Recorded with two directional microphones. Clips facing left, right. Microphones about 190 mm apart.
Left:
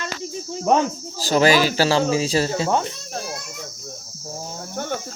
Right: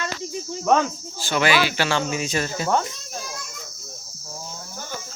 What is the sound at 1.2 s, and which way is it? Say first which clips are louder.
Speech: left 4 dB; 40° left (ahead or behind).